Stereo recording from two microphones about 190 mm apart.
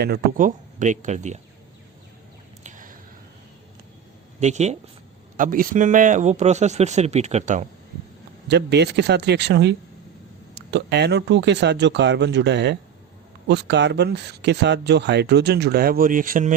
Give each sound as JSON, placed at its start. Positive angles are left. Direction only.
{"t": 0.0, "sound": "speech", "side_deg": -50}
{"t": 2.6, "sound": "a sound", "side_deg": -45}
{"t": 4.4, "sound": "speech", "side_deg": -35}
{"t": 8.4, "sound": "speech", "side_deg": -60}